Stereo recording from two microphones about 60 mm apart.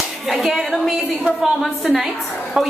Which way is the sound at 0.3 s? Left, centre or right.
Centre.